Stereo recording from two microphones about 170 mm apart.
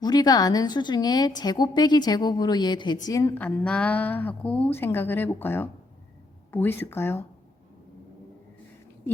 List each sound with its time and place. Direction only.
0.0 s a woman's voice: 25° left (ahead or behind)